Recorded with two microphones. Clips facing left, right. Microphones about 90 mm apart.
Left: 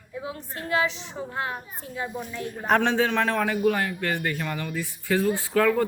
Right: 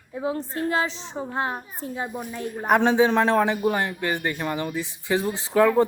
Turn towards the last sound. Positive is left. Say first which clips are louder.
# right 3 dB
turn(degrees=-20)  # may be behind; listen again after turning